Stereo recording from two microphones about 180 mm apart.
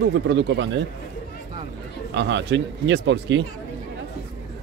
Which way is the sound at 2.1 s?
90° right.